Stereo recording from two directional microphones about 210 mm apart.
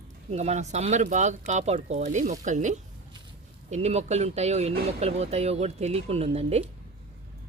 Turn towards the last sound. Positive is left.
turn(degrees=-30)  # may be behind; listen again after turning